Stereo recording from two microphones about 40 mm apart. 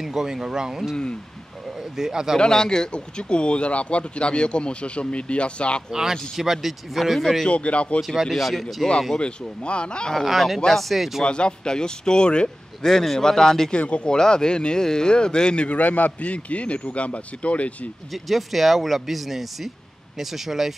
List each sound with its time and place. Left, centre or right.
0.0 s speech: centre
2.0 s speech: centre
2.3 s speech: centre
6.3 s speech: centre
7.4 s speech: left
8.2 s speech: centre
9.2 s speech: left
10.2 s speech: centre
11.2 s speech: left
12.8 s a man's voice: centre
13.7 s speech: left
14.0 s speech: centre; by 17.7 s left
18.1 s speech: centre